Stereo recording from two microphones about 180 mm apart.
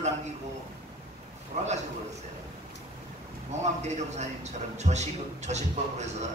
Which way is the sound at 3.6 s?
40° right (ahead or behind).